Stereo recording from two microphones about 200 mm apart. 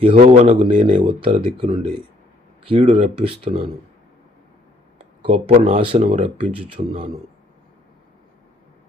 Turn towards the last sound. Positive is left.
turn(degrees=-30)  # may be behind; listen again after turning